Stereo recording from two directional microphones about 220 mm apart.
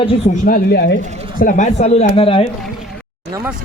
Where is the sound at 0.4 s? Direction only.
45° left (ahead or behind).